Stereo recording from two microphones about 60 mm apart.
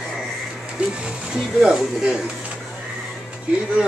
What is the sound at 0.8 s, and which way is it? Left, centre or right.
Music, right.